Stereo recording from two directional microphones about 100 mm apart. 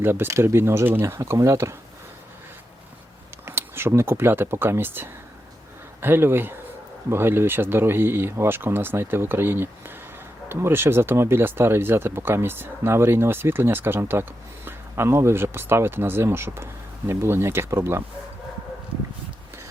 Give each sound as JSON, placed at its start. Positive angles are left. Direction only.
{"t": 0.0, "sound": "speech", "side_deg": -20}
{"t": 3.4, "sound": "speech", "side_deg": -25}